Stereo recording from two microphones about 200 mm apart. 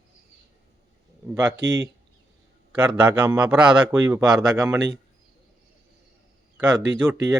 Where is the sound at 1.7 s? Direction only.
20° right (ahead or behind).